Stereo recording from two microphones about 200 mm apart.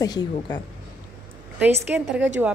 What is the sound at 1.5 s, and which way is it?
Speech, 10° right (ahead or behind).